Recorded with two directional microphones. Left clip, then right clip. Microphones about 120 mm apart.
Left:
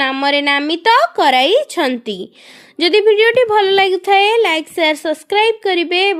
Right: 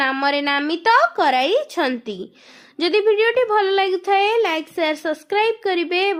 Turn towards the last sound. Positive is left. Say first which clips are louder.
# left 5 dB
turn(degrees=45)  # may be behind; listen again after turning